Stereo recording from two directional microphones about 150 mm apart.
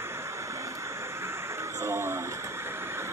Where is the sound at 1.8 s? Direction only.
15° right (ahead or behind).